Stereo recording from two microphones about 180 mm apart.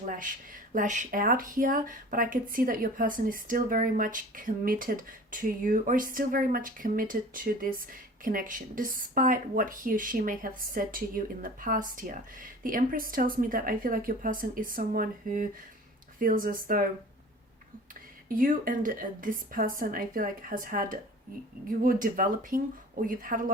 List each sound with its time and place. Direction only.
0.0 s speech: 45° right (ahead or behind)
18.3 s speech: 50° right (ahead or behind)